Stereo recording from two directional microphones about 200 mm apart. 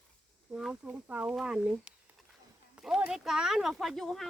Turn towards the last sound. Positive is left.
turn(degrees=0)  # may be behind; listen again after turning